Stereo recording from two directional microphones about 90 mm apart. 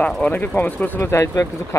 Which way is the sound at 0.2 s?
20° left (ahead or behind).